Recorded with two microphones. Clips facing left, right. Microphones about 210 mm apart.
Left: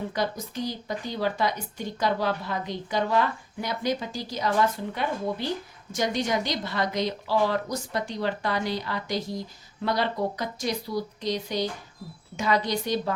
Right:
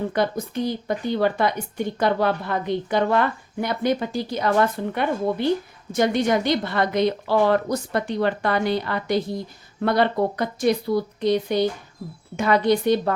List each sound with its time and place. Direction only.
0.1 s speech: 55° right (ahead or behind)